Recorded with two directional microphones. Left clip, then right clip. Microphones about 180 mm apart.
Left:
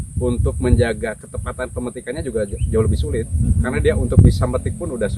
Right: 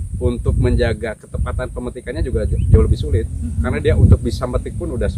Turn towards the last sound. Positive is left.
turn(degrees=-15)  # may be behind; listen again after turning